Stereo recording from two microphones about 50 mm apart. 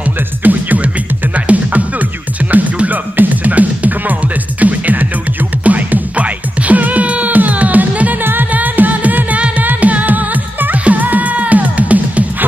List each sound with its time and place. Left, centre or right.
0.4 s music: right